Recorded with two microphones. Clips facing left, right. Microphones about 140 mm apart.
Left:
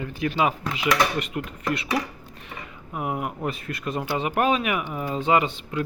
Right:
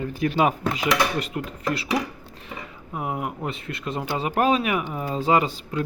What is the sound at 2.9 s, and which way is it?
Speech, 25° right (ahead or behind).